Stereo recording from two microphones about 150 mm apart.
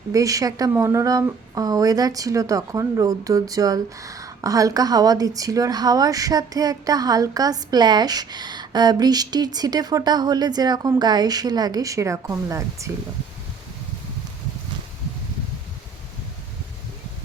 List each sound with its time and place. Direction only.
0.1 s speech: 20° right (ahead or behind)